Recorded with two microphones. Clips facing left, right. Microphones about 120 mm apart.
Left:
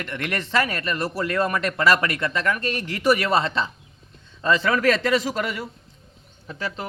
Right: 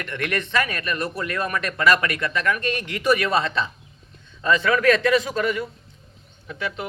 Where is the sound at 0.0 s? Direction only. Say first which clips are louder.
Right 2 dB; 25° left (ahead or behind).